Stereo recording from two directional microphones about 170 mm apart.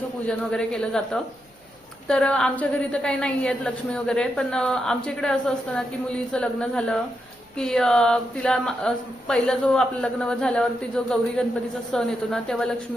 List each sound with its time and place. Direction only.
0.3 s a woman's voice: 5° left (ahead or behind)